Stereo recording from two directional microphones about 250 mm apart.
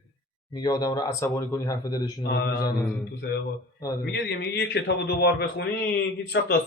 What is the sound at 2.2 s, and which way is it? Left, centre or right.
Speech, left.